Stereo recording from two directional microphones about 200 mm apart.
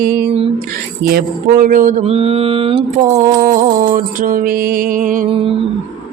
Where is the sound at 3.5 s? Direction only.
40° right (ahead or behind).